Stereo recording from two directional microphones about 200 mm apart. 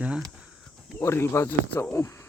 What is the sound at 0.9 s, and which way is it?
Speech, 10° left (ahead or behind).